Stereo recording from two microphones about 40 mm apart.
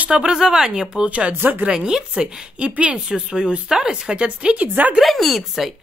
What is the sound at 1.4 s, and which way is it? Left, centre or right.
Speech, right.